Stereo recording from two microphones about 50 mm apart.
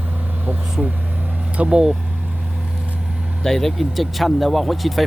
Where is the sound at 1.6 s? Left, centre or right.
Centre.